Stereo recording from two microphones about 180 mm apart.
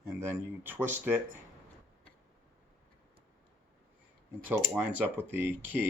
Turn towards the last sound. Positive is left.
turn(degrees=-10)  # may be behind; listen again after turning